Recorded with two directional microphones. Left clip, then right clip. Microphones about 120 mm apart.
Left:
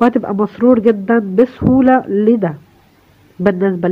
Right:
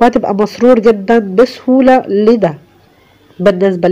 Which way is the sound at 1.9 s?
15° right (ahead or behind).